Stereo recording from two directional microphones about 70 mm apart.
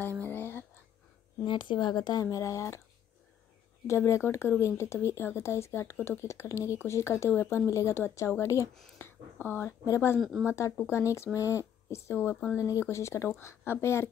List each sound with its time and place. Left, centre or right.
0.2 s a sound: left
1.5 s speech: left
2.3 s speech: left
3.8 s speech: left
7.2 s speech: left
8.9 s speech: left